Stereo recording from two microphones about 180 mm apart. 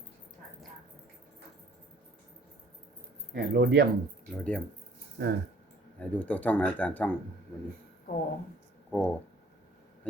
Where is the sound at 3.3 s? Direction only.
60° right (ahead or behind).